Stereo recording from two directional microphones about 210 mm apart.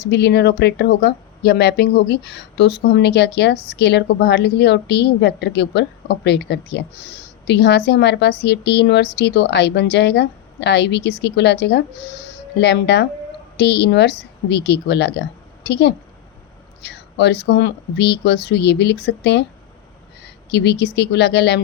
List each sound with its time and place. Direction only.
0.1 s a woman's voice: 55° left (ahead or behind)
20.5 s a woman's voice: 55° left (ahead or behind)